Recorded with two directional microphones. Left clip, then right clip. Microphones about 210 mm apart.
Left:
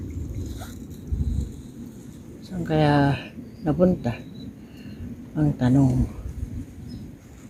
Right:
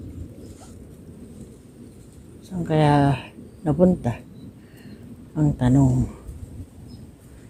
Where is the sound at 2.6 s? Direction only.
15° right (ahead or behind).